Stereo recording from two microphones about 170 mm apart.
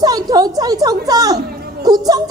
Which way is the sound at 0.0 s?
25° right (ahead or behind).